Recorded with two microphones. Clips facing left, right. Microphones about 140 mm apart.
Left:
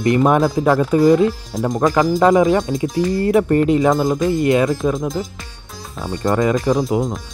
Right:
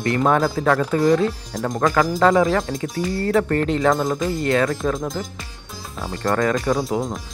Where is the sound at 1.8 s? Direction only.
20° left (ahead or behind).